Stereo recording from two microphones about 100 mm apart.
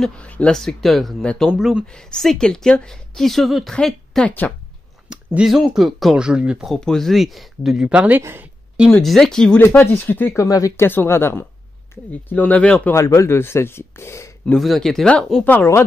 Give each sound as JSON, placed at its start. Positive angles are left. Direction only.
{"t": 0.0, "sound": "a woman's voice", "side_deg": 10}
{"t": 1.9, "sound": "a woman's voice", "side_deg": 5}
{"t": 4.3, "sound": "speech", "side_deg": 15}
{"t": 5.1, "sound": "speech", "side_deg": -5}
{"t": 6.7, "sound": "a woman's voice", "side_deg": 5}
{"t": 8.2, "sound": "speech", "side_deg": -25}
{"t": 8.9, "sound": "a woman's voice", "side_deg": 5}
{"t": 9.8, "sound": "speech", "side_deg": 20}
{"t": 10.4, "sound": "speech", "side_deg": 35}
{"t": 10.9, "sound": "speech", "side_deg": 25}
{"t": 12.9, "sound": "speech", "side_deg": 30}
{"t": 14.6, "sound": "a woman's voice", "side_deg": 0}
{"t": 15.4, "sound": "speech", "side_deg": 20}